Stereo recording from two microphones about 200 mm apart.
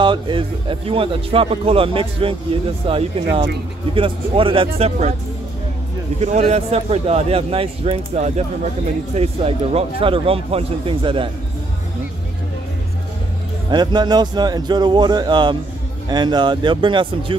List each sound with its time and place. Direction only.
0.0 s speech: 25° right (ahead or behind)
6.2 s speech: 35° right (ahead or behind)
13.7 s speech: 20° right (ahead or behind)